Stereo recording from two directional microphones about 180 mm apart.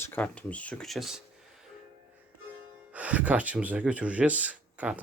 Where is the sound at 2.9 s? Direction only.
10° right (ahead or behind).